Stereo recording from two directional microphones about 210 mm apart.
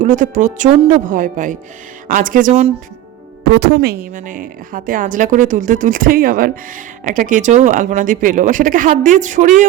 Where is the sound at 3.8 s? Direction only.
45° right (ahead or behind).